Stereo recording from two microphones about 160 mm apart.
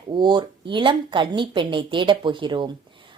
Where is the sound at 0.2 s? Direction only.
30° right (ahead or behind).